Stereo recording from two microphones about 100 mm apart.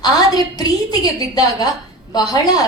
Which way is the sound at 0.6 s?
40° left (ahead or behind).